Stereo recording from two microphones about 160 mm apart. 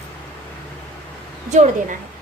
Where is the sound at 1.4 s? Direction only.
45° right (ahead or behind).